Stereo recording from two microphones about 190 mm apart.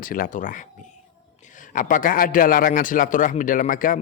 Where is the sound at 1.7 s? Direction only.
45° left (ahead or behind).